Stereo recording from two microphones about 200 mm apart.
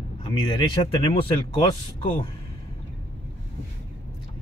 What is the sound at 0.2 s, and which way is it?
Speech, 25° left (ahead or behind).